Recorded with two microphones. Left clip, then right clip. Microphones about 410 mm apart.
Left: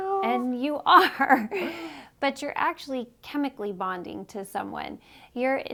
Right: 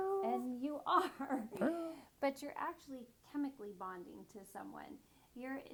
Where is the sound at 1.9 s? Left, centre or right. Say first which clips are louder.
Left 11 dB; left.